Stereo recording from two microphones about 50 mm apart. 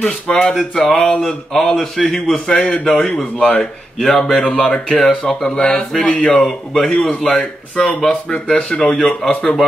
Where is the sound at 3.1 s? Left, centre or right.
Left; by 6.8 s centre.